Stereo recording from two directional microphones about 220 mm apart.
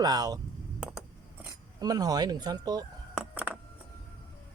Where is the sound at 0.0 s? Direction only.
15° right (ahead or behind).